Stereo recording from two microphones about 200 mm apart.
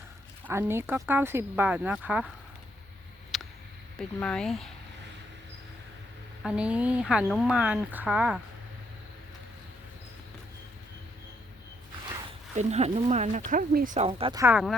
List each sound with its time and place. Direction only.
0.4 s speech: 10° right (ahead or behind)
3.3 s a sound: centre (ahead or behind)
3.9 s speech: 5° left (ahead or behind)
6.4 s speech: 5° right (ahead or behind)
12.5 s speech: 35° right (ahead or behind)
14.1 s speech: 25° right (ahead or behind)
14.4 s speech: 5° right (ahead or behind)